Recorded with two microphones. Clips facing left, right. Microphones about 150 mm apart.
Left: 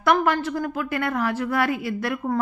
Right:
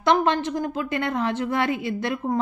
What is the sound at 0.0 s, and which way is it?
A woman's voice, 25° right (ahead or behind).